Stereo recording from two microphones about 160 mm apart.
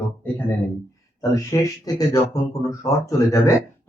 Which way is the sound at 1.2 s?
20° left (ahead or behind).